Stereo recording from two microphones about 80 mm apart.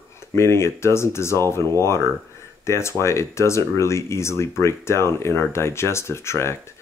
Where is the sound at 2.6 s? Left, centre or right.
Left.